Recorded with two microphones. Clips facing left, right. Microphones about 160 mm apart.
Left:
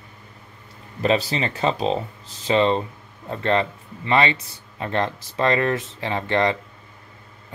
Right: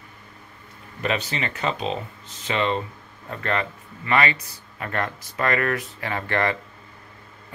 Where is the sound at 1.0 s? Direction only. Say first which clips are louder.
Left 5 dB; 30° left (ahead or behind).